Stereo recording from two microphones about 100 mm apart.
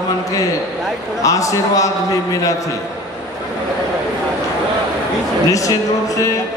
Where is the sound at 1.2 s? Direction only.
35° left (ahead or behind).